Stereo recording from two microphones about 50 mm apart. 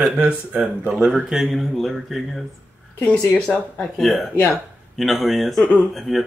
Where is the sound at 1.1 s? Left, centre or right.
Centre.